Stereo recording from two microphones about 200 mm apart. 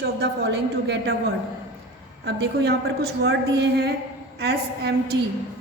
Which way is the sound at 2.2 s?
55° right (ahead or behind).